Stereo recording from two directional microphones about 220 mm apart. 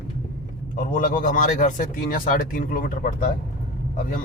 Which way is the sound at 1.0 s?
35° left (ahead or behind).